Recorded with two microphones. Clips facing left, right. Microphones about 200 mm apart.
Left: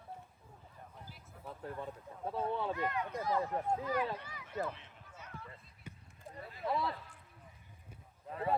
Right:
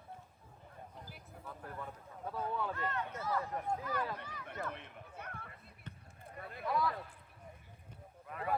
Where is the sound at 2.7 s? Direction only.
15° left (ahead or behind).